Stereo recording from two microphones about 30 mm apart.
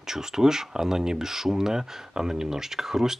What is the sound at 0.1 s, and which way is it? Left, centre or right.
Speech, centre.